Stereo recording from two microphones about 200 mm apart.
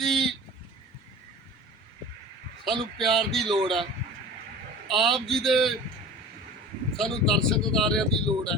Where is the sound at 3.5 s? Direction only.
25° right (ahead or behind).